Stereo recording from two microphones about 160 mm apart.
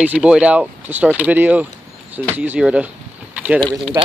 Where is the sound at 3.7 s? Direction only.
30° right (ahead or behind).